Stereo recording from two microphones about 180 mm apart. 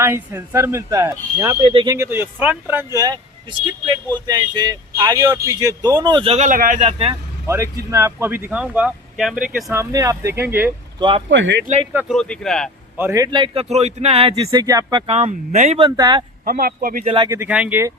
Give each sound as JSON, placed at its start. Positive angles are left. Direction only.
{"t": 0.0, "sound": "speech", "side_deg": -15}
{"t": 1.7, "sound": "speech", "side_deg": -25}
{"t": 2.0, "sound": "speech", "side_deg": -10}
{"t": 4.3, "sound": "speech", "side_deg": -20}
{"t": 6.5, "sound": "speech", "side_deg": -50}
{"t": 7.4, "sound": "speech", "side_deg": -15}
{"t": 9.7, "sound": "speech", "side_deg": -20}
{"t": 11.3, "sound": "speech", "side_deg": -80}
{"t": 11.9, "sound": "speech", "side_deg": 0}
{"t": 13.0, "sound": "speech", "side_deg": -15}
{"t": 15.8, "sound": "speech", "side_deg": -25}
{"t": 16.5, "sound": "speech", "side_deg": -50}
{"t": 17.1, "sound": "speech", "side_deg": -25}
{"t": 17.3, "sound": "speech", "side_deg": -10}